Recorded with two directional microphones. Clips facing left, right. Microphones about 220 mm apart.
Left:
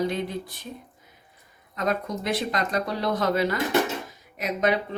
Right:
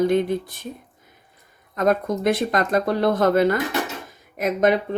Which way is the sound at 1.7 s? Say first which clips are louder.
Right 7 dB; 50° right (ahead or behind).